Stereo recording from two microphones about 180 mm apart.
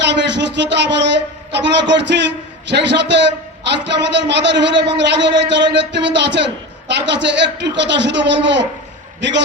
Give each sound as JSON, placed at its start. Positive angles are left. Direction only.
{"t": 0.0, "sound": "a man's voice", "side_deg": -75}